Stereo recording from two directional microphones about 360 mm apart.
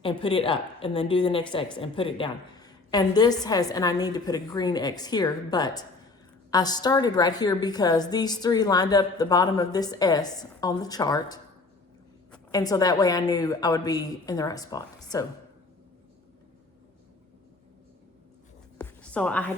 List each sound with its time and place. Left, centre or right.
0.0 s a woman's voice: centre
18.8 s music: centre